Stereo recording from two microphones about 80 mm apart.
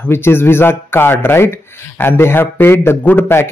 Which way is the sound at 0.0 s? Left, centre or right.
Left.